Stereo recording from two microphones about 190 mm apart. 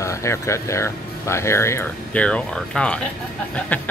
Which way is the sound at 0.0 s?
15° left (ahead or behind).